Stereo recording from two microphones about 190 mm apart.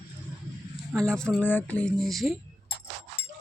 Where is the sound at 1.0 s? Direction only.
5° left (ahead or behind).